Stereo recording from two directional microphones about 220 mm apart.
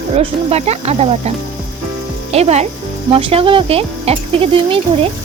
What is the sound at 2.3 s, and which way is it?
Speech, 30° right (ahead or behind).